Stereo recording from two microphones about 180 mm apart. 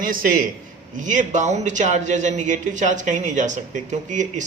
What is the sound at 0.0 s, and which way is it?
A man's voice, 50° right (ahead or behind).